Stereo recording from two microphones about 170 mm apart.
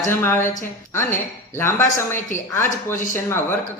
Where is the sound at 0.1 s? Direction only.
15° left (ahead or behind).